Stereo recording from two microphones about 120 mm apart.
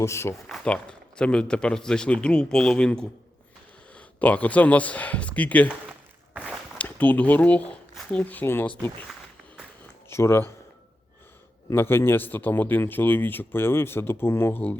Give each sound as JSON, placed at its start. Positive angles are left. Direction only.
{"t": 0.0, "sound": "speech", "side_deg": 25}
{"t": 0.4, "sound": "speech", "side_deg": 5}
{"t": 6.3, "sound": "walk", "side_deg": -5}
{"t": 6.7, "sound": "speech", "side_deg": 15}
{"t": 10.1, "sound": "speech", "side_deg": 20}
{"t": 11.7, "sound": "speech", "side_deg": 20}